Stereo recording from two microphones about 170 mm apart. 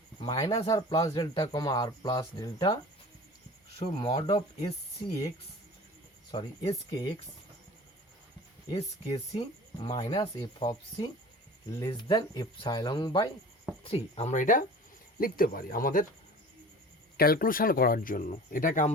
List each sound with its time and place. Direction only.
0.2 s speech: 25° left (ahead or behind)
3.8 s speech: 30° left (ahead or behind)
6.3 s speech: 25° left (ahead or behind)
8.7 s speech: 35° left (ahead or behind); by 16.0 s 55° left (ahead or behind)
17.2 s speech: 60° left (ahead or behind)